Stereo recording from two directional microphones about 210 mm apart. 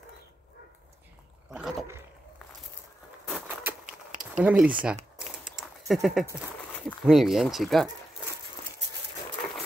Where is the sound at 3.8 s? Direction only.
40° right (ahead or behind).